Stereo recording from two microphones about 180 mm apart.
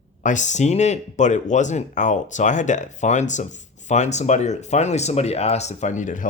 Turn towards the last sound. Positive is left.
turn(degrees=45)  # may be behind; listen again after turning